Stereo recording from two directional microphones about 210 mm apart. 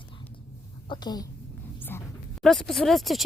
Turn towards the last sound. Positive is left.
turn(degrees=0)  # may be behind; listen again after turning